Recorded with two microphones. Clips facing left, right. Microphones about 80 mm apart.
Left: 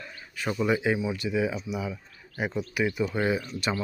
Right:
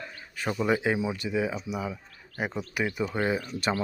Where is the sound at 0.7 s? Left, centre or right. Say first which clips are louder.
Even; right.